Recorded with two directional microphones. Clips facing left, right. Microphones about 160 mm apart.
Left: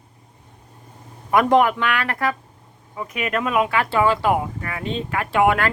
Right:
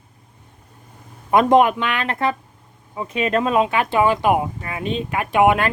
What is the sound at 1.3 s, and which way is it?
Speech, 20° right (ahead or behind).